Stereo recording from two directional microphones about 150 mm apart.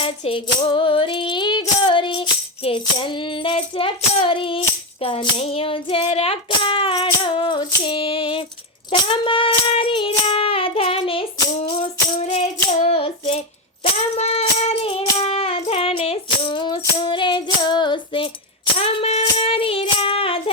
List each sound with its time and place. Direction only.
0.0 s female singing: 35° left (ahead or behind)
4.3 s music: 35° left (ahead or behind)
5.0 s hands: 40° left (ahead or behind)
8.9 s child singing: 35° left (ahead or behind)
12.2 s female singing: 45° left (ahead or behind)
14.2 s music: 45° left (ahead or behind)